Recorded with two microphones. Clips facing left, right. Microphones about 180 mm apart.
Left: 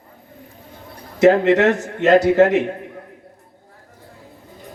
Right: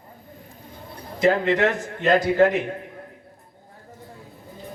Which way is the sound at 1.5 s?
45° left (ahead or behind).